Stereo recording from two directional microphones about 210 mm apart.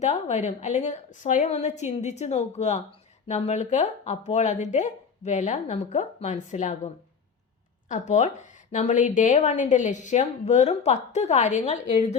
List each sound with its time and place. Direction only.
0.0 s a woman's voice: 35° left (ahead or behind)